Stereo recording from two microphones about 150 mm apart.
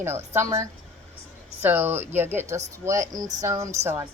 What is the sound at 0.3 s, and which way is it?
A woman's voice, 20° right (ahead or behind).